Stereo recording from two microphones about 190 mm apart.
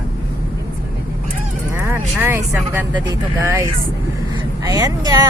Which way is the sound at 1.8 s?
10° right (ahead or behind).